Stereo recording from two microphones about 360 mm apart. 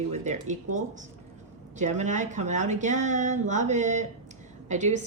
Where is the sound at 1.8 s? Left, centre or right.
Centre.